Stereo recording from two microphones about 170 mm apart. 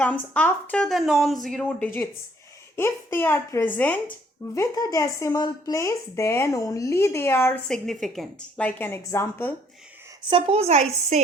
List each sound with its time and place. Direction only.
0.0 s speech: 10° left (ahead or behind)
7.7 s speech: centre (ahead or behind)
10.2 s speech: 30° right (ahead or behind)